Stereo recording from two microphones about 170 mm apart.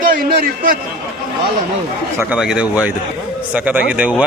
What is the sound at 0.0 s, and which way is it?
Speech, 55° right (ahead or behind).